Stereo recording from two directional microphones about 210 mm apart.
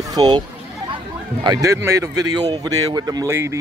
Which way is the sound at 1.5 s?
15° right (ahead or behind).